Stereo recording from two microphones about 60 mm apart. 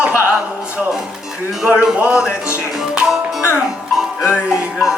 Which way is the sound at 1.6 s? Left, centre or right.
Centre.